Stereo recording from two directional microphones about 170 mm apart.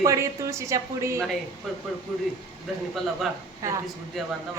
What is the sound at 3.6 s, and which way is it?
Speech, 15° right (ahead or behind).